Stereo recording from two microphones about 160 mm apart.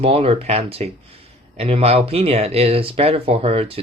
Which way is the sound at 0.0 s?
35° right (ahead or behind).